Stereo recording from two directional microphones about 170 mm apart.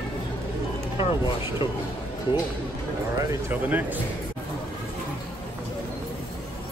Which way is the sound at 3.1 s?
10° right (ahead or behind).